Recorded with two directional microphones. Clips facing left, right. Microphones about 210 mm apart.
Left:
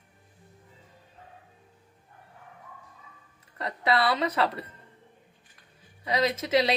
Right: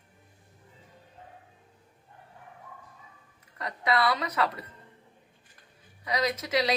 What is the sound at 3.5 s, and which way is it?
Speech, 30° left (ahead or behind).